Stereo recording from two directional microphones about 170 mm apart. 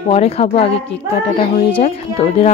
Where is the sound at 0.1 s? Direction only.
35° left (ahead or behind).